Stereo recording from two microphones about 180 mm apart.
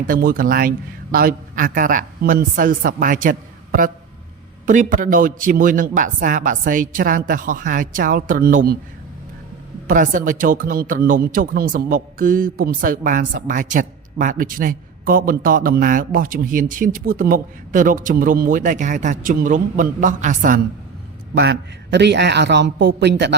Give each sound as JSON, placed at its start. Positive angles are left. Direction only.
{"t": 0.0, "sound": "speech", "side_deg": -50}
{"t": 9.9, "sound": "speech", "side_deg": -50}
{"t": 21.3, "sound": "a man's voice", "side_deg": -70}